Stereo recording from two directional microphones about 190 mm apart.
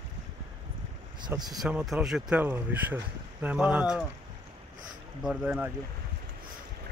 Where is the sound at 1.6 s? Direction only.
Centre (ahead or behind).